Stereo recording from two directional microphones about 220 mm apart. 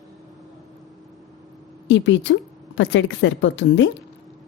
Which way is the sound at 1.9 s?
55° left (ahead or behind).